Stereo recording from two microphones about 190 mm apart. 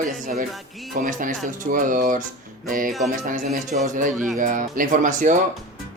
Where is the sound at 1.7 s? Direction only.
45° right (ahead or behind).